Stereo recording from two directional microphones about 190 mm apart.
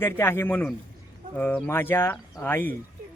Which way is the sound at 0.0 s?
10° left (ahead or behind).